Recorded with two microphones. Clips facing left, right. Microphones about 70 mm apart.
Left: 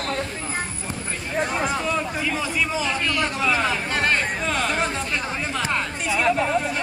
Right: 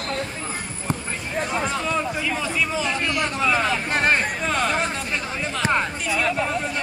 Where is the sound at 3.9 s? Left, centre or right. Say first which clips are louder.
Right 3 dB; centre.